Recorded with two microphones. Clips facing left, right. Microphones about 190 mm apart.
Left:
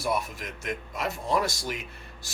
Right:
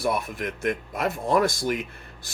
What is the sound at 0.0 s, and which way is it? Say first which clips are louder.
Speech: right 3 dB; 55° right (ahead or behind).